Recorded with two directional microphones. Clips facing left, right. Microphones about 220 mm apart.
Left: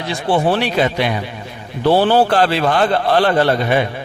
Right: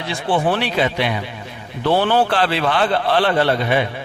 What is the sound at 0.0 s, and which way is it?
Speech, 40° left (ahead or behind).